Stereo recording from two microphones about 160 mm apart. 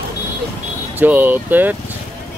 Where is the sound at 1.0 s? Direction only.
10° right (ahead or behind).